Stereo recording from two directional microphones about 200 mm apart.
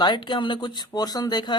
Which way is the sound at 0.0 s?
20° left (ahead or behind).